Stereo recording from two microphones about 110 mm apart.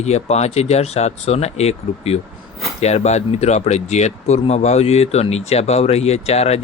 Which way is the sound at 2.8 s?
85° left.